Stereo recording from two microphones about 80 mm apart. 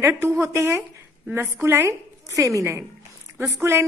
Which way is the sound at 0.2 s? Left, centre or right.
Right.